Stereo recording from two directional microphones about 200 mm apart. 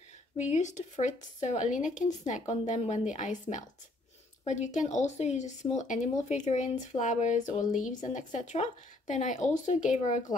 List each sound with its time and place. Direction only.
0.5 s speech: 35° left (ahead or behind)